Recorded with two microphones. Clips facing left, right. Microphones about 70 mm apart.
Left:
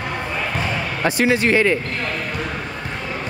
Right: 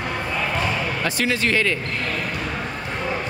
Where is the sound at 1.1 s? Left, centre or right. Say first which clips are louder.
Left 7 dB; left.